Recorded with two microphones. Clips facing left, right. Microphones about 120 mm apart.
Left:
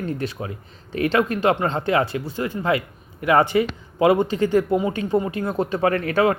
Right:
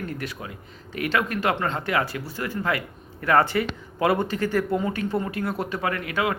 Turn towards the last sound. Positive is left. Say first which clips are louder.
# left 7 dB
turn(degrees=35)  # may be behind; listen again after turning